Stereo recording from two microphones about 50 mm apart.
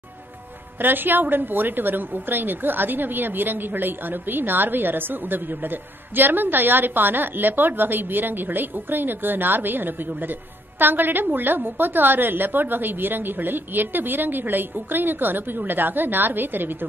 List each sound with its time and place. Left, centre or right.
0.7 s a woman's voice: right